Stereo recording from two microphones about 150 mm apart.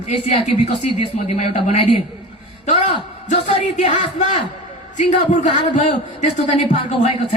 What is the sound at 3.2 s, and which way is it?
A man's voice, 55° left (ahead or behind).